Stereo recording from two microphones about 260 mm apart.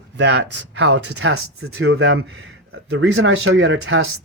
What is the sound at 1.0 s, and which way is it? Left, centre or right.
Speech, right.